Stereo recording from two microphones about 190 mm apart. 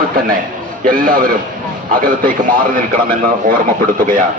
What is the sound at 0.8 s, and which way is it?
A man's voice, 45° right (ahead or behind).